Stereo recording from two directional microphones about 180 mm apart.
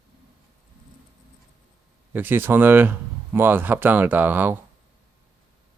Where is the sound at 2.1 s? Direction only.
10° right (ahead or behind).